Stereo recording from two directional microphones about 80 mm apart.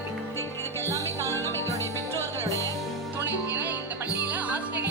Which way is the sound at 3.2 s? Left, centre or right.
Right.